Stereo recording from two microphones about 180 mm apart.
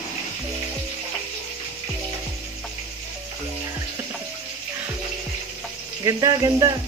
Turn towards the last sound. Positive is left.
turn(degrees=-20)  # may be behind; listen again after turning